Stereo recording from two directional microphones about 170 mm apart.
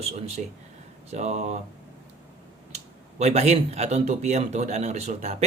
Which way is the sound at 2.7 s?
40° right (ahead or behind).